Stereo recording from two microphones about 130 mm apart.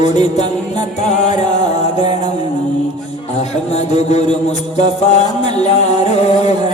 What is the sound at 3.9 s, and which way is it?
Music, 60° left (ahead or behind).